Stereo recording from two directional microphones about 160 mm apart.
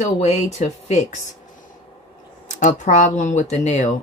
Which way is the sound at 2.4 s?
50° left (ahead or behind).